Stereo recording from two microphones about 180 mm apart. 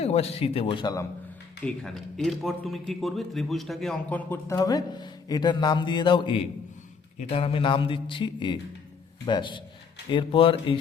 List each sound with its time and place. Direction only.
0.0 s speech: 35° left (ahead or behind)
1.6 s a man's voice: 5° left (ahead or behind); by 10.8 s 30° left (ahead or behind)